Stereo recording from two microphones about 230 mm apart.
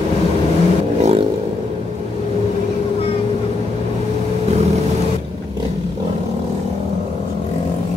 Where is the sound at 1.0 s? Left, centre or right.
Right.